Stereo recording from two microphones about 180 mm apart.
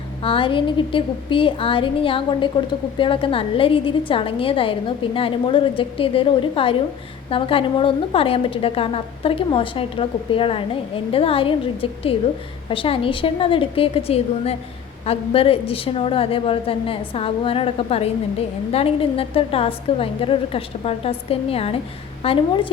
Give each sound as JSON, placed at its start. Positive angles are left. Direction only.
{"t": 0.2, "sound": "a woman's voice", "side_deg": 30}